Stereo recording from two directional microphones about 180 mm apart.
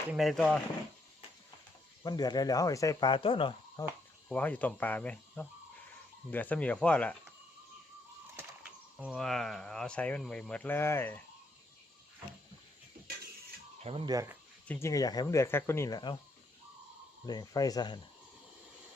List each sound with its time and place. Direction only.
0.1 s speech: centre (ahead or behind)
2.0 s speech: 20° left (ahead or behind)
4.3 s speech: 10° left (ahead or behind)
8.4 s speech: 5° right (ahead or behind); by 11.2 s 10° left (ahead or behind)
13.8 s speech: 30° right (ahead or behind)
14.1 s speech: 20° right (ahead or behind)
14.7 s speech: 15° left (ahead or behind)
17.2 s speech: 20° left (ahead or behind)